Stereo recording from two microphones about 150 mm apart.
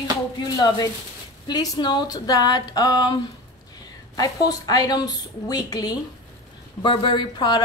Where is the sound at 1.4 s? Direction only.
25° left (ahead or behind).